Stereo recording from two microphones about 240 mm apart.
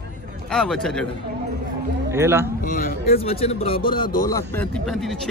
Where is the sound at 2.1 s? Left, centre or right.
Centre.